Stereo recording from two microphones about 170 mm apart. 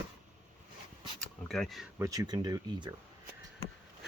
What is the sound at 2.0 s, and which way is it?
Speech, 20° right (ahead or behind).